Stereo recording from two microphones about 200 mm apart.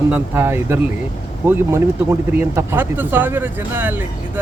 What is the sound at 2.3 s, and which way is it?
Speech, 10° right (ahead or behind).